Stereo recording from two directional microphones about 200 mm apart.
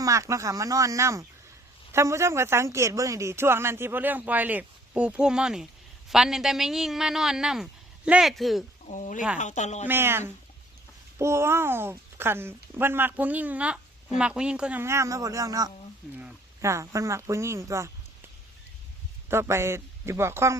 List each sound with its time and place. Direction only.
0.0 s a woman's voice: 15° right (ahead or behind)
8.9 s speech: 40° left (ahead or behind)
9.8 s speech: 10° right (ahead or behind)
19.3 s speech: 10° right (ahead or behind)